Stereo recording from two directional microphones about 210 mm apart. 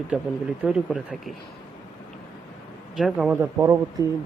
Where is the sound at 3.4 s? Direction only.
15° right (ahead or behind).